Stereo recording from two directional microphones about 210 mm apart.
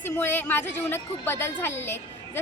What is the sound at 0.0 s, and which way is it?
A woman's voice, 10° left (ahead or behind).